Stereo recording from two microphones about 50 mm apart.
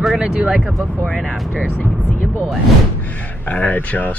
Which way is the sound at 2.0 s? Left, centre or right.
Left.